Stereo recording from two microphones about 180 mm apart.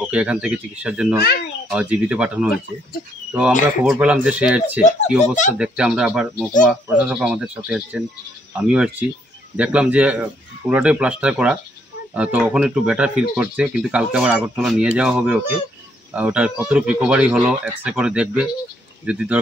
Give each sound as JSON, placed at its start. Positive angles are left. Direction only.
{"t": 0.1, "sound": "speech", "side_deg": -5}
{"t": 3.8, "sound": "speech", "side_deg": -5}
{"t": 5.2, "sound": "speech", "side_deg": 40}
{"t": 5.5, "sound": "speech", "side_deg": -5}